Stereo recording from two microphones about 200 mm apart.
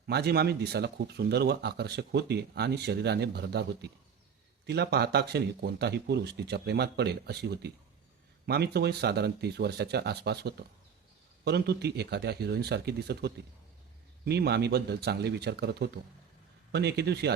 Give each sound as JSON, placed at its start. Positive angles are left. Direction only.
{"t": 0.1, "sound": "speech", "side_deg": -55}